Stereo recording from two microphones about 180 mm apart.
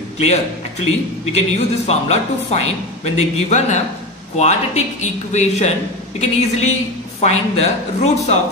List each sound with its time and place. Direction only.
0.2 s a man's voice: 35° left (ahead or behind)